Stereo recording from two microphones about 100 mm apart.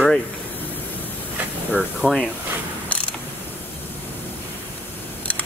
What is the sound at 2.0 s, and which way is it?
Speech, 15° left (ahead or behind).